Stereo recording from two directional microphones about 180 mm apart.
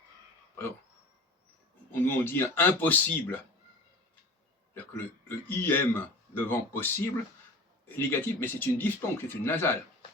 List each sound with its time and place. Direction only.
1.9 s speech: 10° left (ahead or behind)
5.5 s speech: 10° left (ahead or behind)